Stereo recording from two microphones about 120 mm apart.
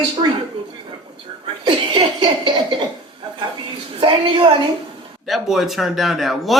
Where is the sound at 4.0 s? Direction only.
45° right (ahead or behind).